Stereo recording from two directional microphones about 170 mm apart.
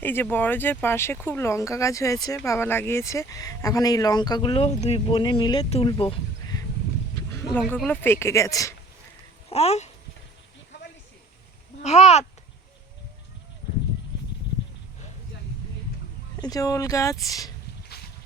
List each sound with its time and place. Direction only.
0.0 s speech: 10° left (ahead or behind); by 6.6 s 30° left (ahead or behind)
7.9 s speech: 15° left (ahead or behind)
9.5 s speech: 35° left (ahead or behind)
11.8 s speech: 40° left (ahead or behind)
16.4 s speech: 20° left (ahead or behind)